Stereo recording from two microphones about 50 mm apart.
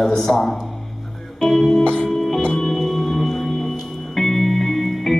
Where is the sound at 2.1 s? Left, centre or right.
Centre.